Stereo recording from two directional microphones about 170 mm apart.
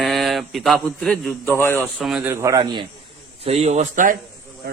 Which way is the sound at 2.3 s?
15° right (ahead or behind).